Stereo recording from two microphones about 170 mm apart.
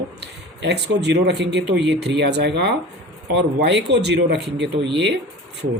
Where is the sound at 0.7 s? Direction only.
85° right.